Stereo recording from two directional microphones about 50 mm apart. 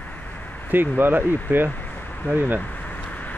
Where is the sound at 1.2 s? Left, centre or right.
Left.